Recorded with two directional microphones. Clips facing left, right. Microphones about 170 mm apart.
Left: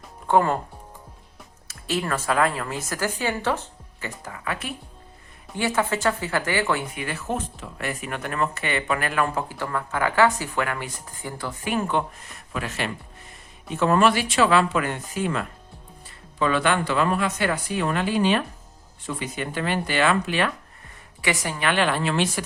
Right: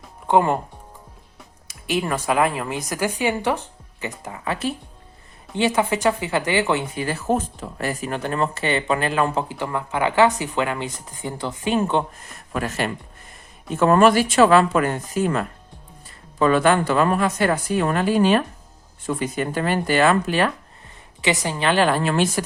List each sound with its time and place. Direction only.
0.3 s speech: 20° right (ahead or behind)
1.6 s speech: 15° right (ahead or behind)
7.0 s speech: 35° right (ahead or behind)
12.5 s speech: 45° right (ahead or behind)
21.2 s a woman's voice: 20° right (ahead or behind); by 22.4 s 45° right (ahead or behind)